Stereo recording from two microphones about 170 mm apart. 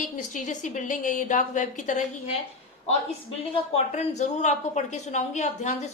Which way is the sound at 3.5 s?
40° left (ahead or behind).